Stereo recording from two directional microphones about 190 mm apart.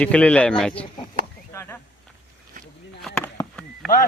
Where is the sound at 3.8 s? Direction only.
Centre (ahead or behind).